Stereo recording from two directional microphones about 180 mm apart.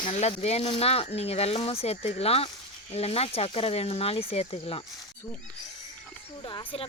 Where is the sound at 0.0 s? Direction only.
35° left (ahead or behind).